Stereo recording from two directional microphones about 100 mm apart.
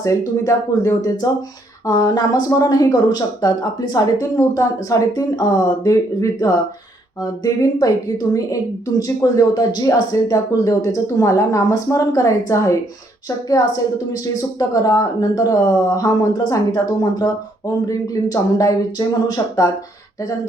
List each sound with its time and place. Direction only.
0.0 s speech: 35° left (ahead or behind)